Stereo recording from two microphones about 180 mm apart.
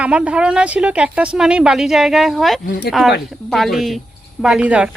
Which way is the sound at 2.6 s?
60° left (ahead or behind).